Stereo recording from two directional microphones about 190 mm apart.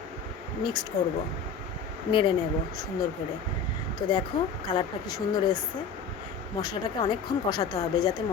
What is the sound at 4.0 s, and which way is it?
Speech, 25° left (ahead or behind).